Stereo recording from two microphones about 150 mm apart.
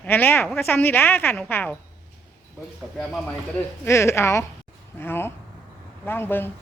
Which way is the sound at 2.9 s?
Centre (ahead or behind).